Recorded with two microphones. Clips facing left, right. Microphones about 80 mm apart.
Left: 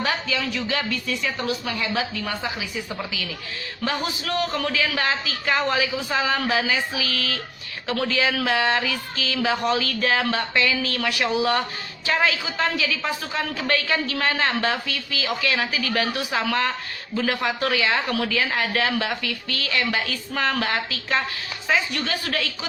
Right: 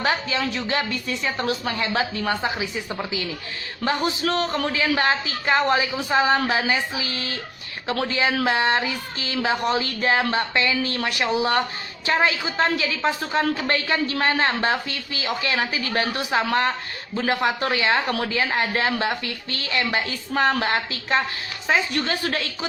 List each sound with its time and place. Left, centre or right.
0.0 s a woman's voice: right
1.4 s a woman's voice: right
3.8 s a woman's voice: right
6.1 s a woman's voice: right